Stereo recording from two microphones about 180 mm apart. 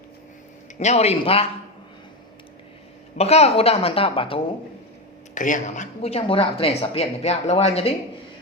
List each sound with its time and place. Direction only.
0.8 s speech: 35° left (ahead or behind)
3.2 s speech: 35° left (ahead or behind)
5.3 s speech: 45° left (ahead or behind)